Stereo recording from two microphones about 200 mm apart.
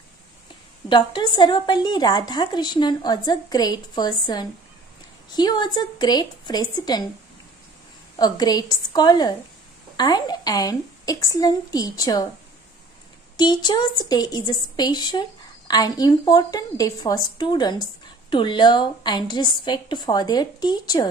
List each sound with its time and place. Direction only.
0.8 s a woman's voice: 20° left (ahead or behind)
8.2 s a woman's voice: 20° left (ahead or behind)
13.4 s a woman's voice: 20° left (ahead or behind)